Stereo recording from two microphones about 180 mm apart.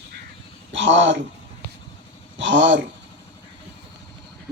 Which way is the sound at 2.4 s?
90° right.